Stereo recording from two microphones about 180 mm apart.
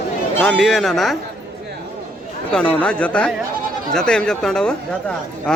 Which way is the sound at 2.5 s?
5° left (ahead or behind).